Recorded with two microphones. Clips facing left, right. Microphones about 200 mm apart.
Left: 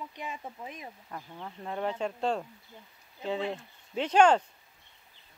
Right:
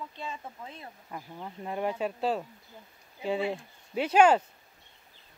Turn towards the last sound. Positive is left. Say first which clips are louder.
# right 1 dB
turn(degrees=-10)  # may be behind; listen again after turning